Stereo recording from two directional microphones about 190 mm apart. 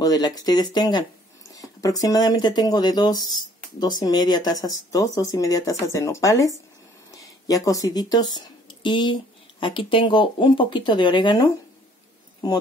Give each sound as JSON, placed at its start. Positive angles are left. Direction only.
{"t": 0.0, "sound": "speech", "side_deg": 20}